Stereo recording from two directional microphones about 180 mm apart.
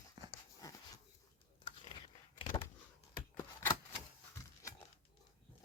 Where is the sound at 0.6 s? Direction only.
20° left (ahead or behind).